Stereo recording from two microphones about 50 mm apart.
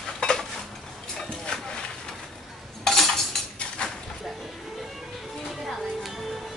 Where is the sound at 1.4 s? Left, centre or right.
Centre.